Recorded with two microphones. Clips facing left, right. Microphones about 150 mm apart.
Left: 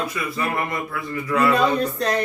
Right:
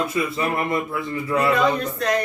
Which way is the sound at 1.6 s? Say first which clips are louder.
Left 1 dB; 30° left (ahead or behind).